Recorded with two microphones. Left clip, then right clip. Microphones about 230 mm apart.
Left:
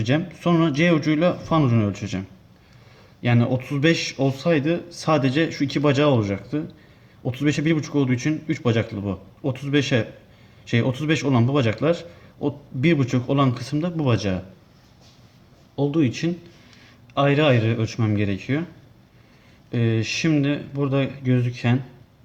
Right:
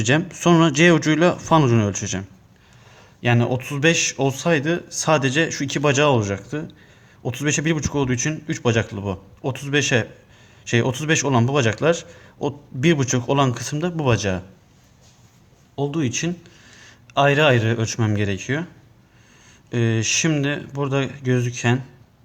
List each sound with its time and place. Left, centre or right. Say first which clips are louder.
0.0 s a man's voice: right 4 dB; right
3.2 s a man's voice: right 2 dB; right
15.7 s a man's voice: left 2 dB; right
19.7 s a man's voice: right 3 dB; right